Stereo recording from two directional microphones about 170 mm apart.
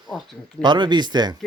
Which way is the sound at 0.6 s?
25° right (ahead or behind).